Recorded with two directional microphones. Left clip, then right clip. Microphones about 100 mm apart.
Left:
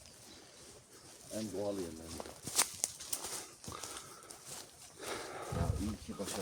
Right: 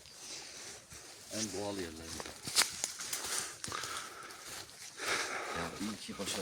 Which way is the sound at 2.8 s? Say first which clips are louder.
Right 3 dB; centre (ahead or behind).